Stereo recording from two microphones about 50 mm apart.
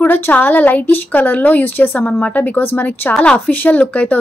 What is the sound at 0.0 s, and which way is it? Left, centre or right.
Speech, left.